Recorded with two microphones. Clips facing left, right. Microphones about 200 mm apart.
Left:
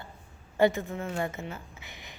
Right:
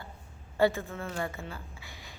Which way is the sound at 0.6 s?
20° left (ahead or behind).